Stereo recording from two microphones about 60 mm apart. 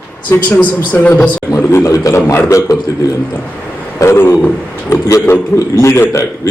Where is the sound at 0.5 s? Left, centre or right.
Left.